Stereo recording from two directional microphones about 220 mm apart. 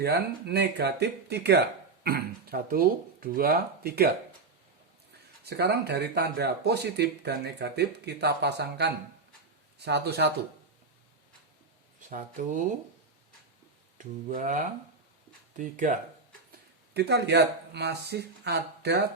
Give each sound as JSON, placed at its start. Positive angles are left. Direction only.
{"t": 0.0, "sound": "speech", "side_deg": -45}
{"t": 5.5, "sound": "speech", "side_deg": -50}
{"t": 11.9, "sound": "speech", "side_deg": -35}
{"t": 14.0, "sound": "speech", "side_deg": -35}
{"t": 16.5, "sound": "speech", "side_deg": -50}